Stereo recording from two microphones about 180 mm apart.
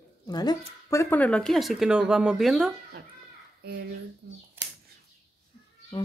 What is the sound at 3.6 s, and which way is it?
Speech, 60° right (ahead or behind).